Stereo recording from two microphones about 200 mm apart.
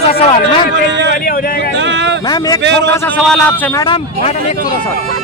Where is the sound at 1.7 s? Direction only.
60° right (ahead or behind).